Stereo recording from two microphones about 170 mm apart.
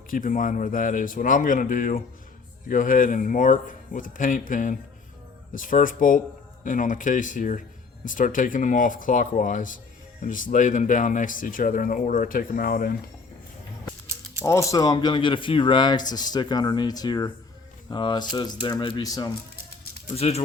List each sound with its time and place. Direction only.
0.1 s speech: 50° left (ahead or behind)
14.4 s speech: 20° left (ahead or behind)
20.1 s speech: 35° left (ahead or behind)